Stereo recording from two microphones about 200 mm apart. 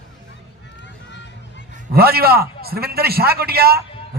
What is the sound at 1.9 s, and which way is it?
A man's voice, 50° right (ahead or behind).